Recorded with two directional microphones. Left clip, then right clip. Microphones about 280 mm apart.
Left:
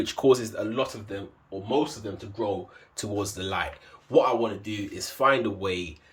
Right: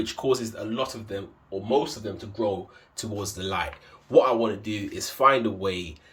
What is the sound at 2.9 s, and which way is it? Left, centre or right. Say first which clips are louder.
Speech: left 2 dB; centre.